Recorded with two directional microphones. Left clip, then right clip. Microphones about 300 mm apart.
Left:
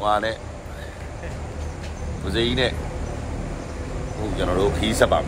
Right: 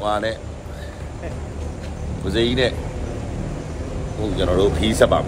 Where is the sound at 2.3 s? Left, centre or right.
Centre.